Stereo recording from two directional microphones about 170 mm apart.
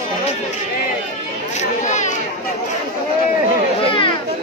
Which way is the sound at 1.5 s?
45° left (ahead or behind).